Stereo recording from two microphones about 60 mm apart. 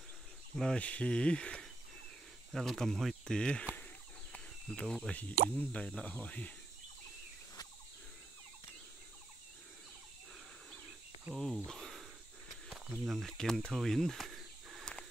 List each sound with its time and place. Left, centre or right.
0.7 s speech: left
2.5 s speech: centre
3.3 s speech: centre
3.7 s a sound: left
5.1 s speech: left
11.3 s speech: centre
13.2 s speech: centre
13.8 s a sound: centre